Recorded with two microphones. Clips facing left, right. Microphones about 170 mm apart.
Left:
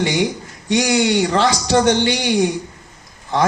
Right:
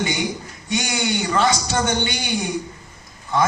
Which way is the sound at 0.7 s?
75° left (ahead or behind).